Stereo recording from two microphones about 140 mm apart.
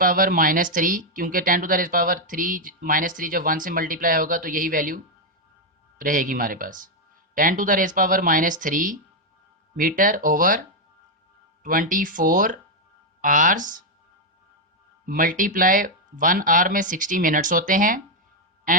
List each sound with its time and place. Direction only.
0.0 s speech: 80° right
6.0 s speech: 75° right (ahead or behind)
9.7 s speech: 85° right
11.6 s speech: 80° right
15.0 s speech: 80° right
18.7 s a sound: 80° right